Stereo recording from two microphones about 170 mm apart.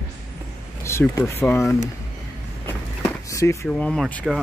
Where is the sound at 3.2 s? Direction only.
20° left (ahead or behind).